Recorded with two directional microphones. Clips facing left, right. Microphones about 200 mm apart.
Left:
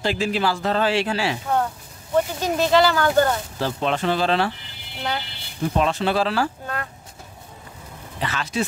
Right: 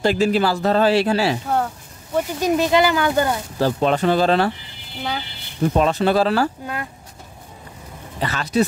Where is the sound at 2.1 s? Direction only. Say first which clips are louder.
Right 2 dB; 15° right (ahead or behind).